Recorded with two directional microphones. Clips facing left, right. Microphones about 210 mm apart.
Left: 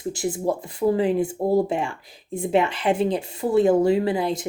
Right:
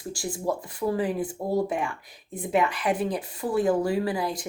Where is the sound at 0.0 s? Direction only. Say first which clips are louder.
Left 5 dB; 20° left (ahead or behind).